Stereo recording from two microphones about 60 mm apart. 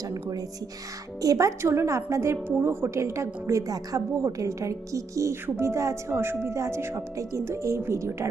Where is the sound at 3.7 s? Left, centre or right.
Right.